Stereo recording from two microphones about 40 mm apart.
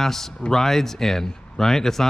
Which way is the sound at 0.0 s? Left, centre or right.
Centre.